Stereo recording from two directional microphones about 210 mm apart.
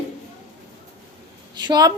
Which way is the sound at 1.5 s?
20° right (ahead or behind).